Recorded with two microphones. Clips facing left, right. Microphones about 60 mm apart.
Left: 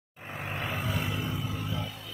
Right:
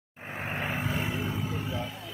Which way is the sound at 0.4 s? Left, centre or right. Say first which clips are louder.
Right 2 dB; right.